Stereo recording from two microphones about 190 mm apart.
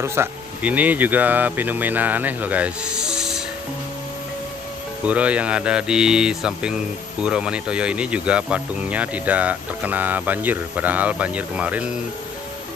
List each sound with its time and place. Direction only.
0.0 s speech: 15° right (ahead or behind)
5.0 s speech: 5° right (ahead or behind)